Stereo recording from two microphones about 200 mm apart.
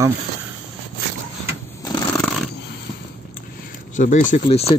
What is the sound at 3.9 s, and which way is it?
Speech, 40° left (ahead or behind).